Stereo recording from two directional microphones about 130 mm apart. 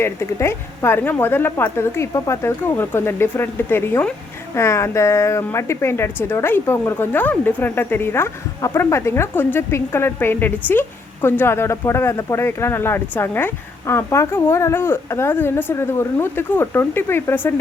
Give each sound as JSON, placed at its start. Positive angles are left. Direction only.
{"t": 0.0, "sound": "speech", "side_deg": 20}